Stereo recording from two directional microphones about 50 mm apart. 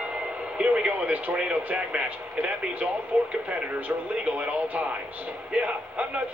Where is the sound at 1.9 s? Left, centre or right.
Centre.